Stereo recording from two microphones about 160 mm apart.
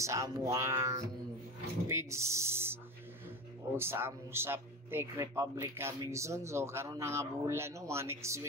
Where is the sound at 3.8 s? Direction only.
15° right (ahead or behind).